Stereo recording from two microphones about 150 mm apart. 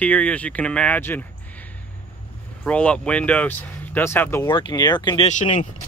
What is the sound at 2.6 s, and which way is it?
Speech, 10° left (ahead or behind).